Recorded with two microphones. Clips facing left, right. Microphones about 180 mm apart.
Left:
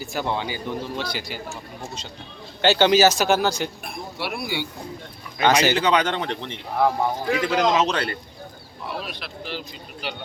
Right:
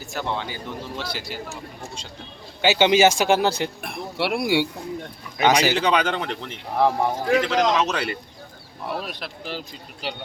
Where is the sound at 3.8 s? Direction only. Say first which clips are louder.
Right 5 dB; 75° right (ahead or behind).